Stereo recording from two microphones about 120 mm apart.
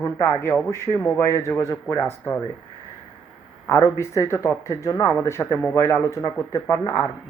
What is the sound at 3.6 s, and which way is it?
Speech, 25° left (ahead or behind).